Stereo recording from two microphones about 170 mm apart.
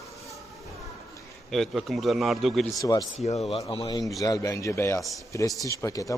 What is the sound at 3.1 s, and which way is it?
Speech, 40° left (ahead or behind).